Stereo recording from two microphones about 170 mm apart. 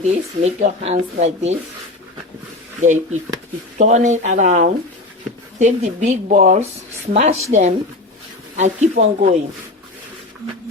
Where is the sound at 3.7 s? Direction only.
45° right (ahead or behind).